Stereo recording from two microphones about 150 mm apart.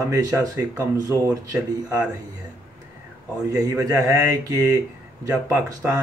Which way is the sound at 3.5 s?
20° right (ahead or behind).